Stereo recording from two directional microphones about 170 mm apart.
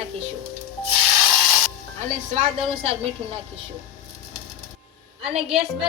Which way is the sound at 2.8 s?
35° right (ahead or behind).